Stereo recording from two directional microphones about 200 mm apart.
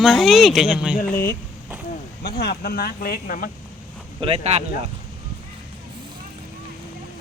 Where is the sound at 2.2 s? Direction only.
55° left (ahead or behind).